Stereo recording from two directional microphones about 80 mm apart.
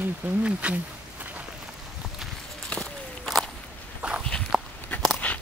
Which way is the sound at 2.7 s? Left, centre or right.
Centre.